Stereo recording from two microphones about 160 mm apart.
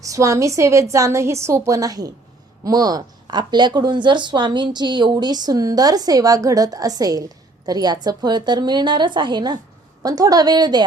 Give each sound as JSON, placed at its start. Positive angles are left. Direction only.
{"t": 0.0, "sound": "speech", "side_deg": -20}